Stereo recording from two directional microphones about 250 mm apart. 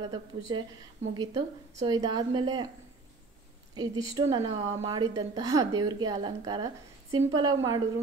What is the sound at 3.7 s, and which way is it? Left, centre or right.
A woman's voice, centre.